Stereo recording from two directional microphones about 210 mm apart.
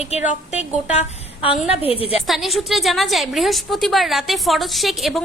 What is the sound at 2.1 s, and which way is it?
A woman's voice, centre (ahead or behind).